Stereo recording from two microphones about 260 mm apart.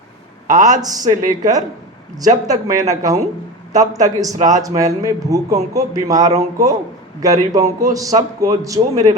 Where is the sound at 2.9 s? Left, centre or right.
Centre.